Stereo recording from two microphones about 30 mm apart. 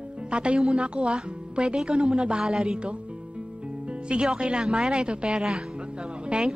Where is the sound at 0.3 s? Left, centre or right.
Right.